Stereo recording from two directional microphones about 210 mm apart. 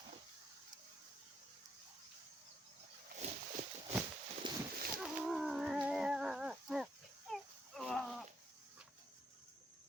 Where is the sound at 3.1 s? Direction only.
35° right (ahead or behind).